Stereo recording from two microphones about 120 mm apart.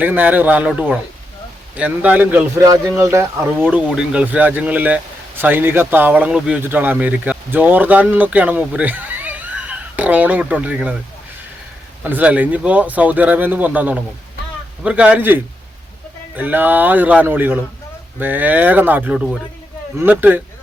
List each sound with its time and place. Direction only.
0.0 s speech: 15° right (ahead or behind)
1.7 s speech: 15° right (ahead or behind)
2.6 s speech: 30° right (ahead or behind); by 10.9 s 10° right (ahead or behind)
12.0 s speech: 15° right (ahead or behind)